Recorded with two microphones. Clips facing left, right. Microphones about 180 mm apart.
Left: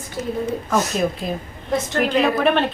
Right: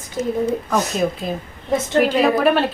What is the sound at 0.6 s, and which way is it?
A woman's voice, centre (ahead or behind).